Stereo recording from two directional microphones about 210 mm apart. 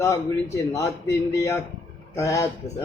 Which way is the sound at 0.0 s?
15° left (ahead or behind).